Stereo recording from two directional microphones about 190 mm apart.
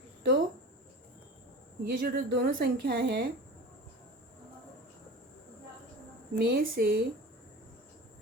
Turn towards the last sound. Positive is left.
turn(degrees=-55)  # may be behind; listen again after turning